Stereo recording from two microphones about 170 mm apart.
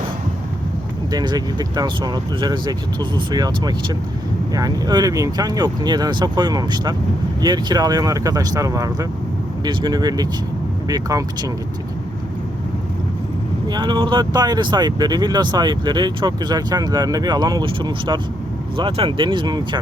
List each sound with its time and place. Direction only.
1.1 s speech: 25° right (ahead or behind)
13.7 s speech: 25° right (ahead or behind)